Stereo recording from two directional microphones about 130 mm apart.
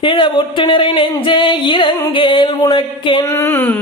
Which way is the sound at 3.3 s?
15° left (ahead or behind).